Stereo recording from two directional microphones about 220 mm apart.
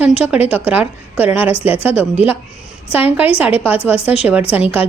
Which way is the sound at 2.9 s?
5° right (ahead or behind).